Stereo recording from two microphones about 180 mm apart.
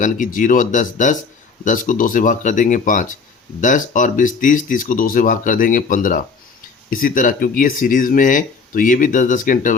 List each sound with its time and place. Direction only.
0.0 s speech: 50° left (ahead or behind)